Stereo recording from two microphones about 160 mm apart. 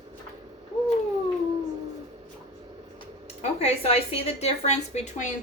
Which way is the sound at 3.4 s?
40° left (ahead or behind).